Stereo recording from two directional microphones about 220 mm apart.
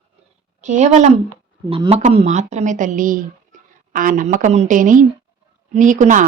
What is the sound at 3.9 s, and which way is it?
A woman's voice, 40° right (ahead or behind).